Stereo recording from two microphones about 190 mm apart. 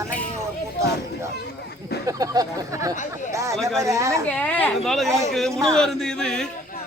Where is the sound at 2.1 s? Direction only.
20° right (ahead or behind).